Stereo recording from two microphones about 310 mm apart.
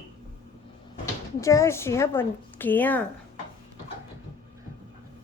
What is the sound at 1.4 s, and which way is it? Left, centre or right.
Speech, centre.